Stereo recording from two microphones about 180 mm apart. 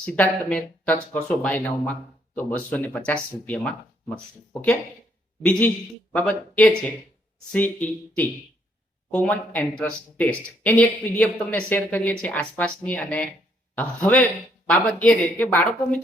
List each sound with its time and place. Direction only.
0.0 s speech: 5° left (ahead or behind)
5.4 s speech: 10° left (ahead or behind)